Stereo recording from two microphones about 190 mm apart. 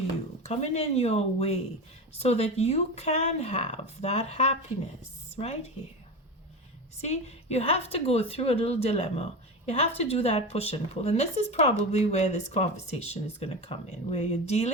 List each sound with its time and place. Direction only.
0.4 s speech: 35° left (ahead or behind)
7.0 s speech: 35° left (ahead or behind)